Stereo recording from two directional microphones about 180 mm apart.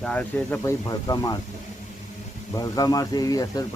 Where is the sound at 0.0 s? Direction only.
5° left (ahead or behind); by 1.4 s 20° left (ahead or behind).